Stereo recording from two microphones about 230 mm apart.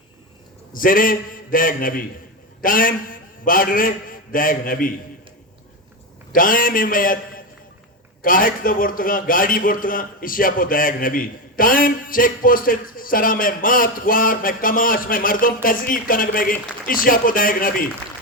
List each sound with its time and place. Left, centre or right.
0.7 s a man's voice: left
6.3 s a man's voice: left